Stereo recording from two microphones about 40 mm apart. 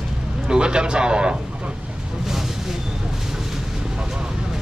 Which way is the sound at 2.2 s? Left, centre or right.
Centre.